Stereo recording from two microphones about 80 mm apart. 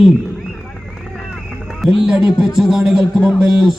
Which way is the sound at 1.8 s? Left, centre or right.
Centre.